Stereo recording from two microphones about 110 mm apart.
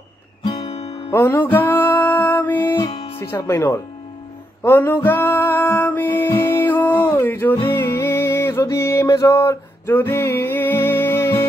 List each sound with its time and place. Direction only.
0.6 s music: 70° left (ahead or behind)
1.1 s music: 20° left (ahead or behind)
3.2 s speech: 25° left (ahead or behind)
4.6 s music: 20° left (ahead or behind)